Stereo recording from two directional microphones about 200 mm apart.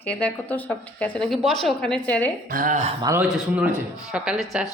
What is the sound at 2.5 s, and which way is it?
Speech, 40° right (ahead or behind).